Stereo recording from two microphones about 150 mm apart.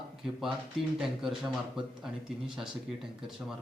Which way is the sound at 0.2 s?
Centre (ahead or behind).